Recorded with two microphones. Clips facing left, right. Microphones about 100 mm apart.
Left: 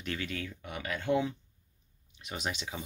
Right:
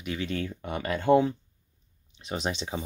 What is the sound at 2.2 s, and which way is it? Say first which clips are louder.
Speech: right 6 dB; 30° right (ahead or behind).